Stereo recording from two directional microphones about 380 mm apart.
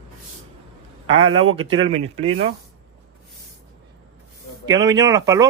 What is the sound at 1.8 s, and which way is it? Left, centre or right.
Speech, centre.